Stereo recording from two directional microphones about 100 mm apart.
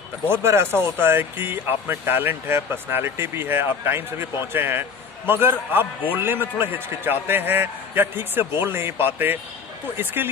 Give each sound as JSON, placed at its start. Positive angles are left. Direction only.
{"t": 0.3, "sound": "speech", "side_deg": -25}